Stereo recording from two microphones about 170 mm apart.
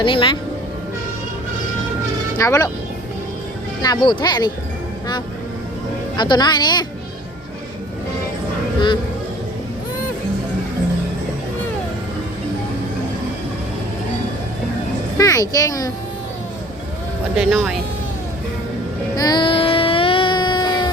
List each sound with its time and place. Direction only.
0.0 s speech: 30° left (ahead or behind)
2.4 s speech: 20° left (ahead or behind)
3.8 s speech: 25° left (ahead or behind)
6.1 s speech: 25° left (ahead or behind)
15.2 s speech: 20° left (ahead or behind)
17.3 s speech: centre (ahead or behind)
19.1 s child singing: 25° left (ahead or behind)